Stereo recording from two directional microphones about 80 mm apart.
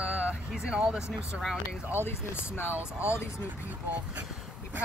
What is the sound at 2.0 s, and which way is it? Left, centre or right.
Speech, left.